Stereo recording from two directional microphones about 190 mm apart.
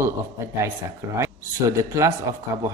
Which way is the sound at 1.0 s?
15° right (ahead or behind).